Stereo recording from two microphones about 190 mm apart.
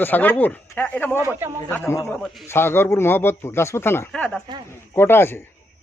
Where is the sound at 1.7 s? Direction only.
15° left (ahead or behind).